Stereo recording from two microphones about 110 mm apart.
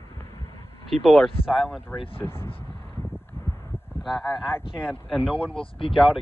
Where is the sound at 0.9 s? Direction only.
Centre (ahead or behind).